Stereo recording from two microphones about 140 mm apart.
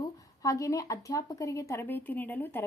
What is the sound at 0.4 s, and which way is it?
Speech, 25° left (ahead or behind).